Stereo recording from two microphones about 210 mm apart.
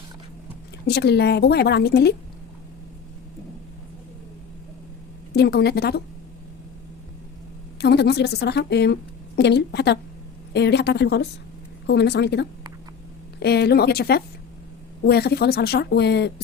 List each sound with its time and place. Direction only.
0.9 s a woman's voice: 50° left (ahead or behind)
5.3 s a woman's voice: 50° left (ahead or behind)
7.8 s a woman's voice: 50° left (ahead or behind)